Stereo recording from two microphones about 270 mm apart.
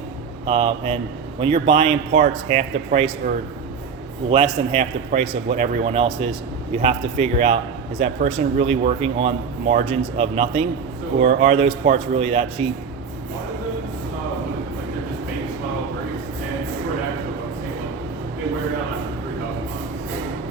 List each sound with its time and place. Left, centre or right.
0.4 s speech: centre